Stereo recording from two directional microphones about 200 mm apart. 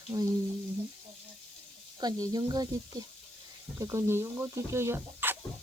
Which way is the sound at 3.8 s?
15° right (ahead or behind).